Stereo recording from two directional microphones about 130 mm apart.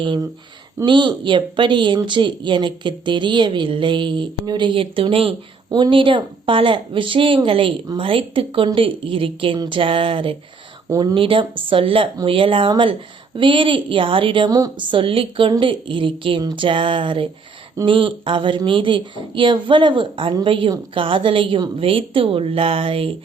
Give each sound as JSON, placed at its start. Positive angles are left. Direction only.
{"t": 0.0, "sound": "a woman's voice", "side_deg": -40}
{"t": 10.8, "sound": "speech", "side_deg": -25}
{"t": 11.1, "sound": "a woman's voice", "side_deg": -40}